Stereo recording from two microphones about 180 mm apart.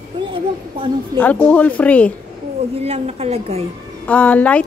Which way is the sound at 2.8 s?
35° right (ahead or behind).